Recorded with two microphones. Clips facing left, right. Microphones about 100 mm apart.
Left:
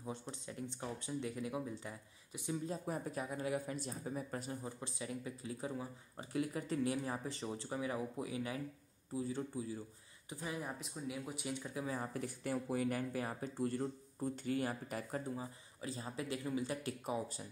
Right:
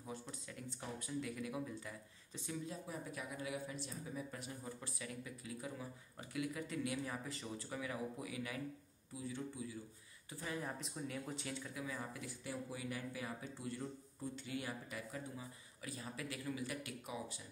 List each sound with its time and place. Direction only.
0.0 s speech: 25° left (ahead or behind)
2.6 s speech: 40° left (ahead or behind)
4.6 s speech: 25° left (ahead or behind)
10.3 s speech: 15° left (ahead or behind)
10.8 s speech: 5° left (ahead or behind)
11.7 s speech: 35° left (ahead or behind)